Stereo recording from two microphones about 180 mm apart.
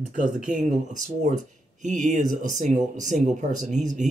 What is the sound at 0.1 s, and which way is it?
Speech, 45° right (ahead or behind).